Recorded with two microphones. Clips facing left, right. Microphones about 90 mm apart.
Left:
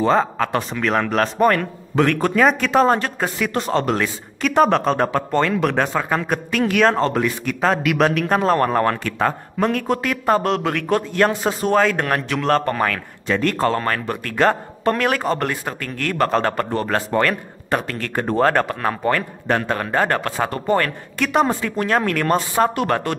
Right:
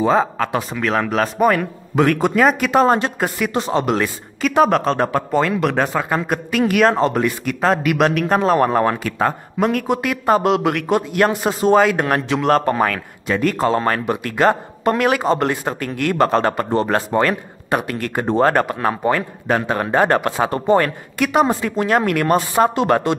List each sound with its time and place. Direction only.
0.0 s speech: 5° right (ahead or behind)
15.2 s a man's voice: 20° right (ahead or behind)
16.3 s speech: 5° right (ahead or behind)
16.7 s speech: 20° right (ahead or behind)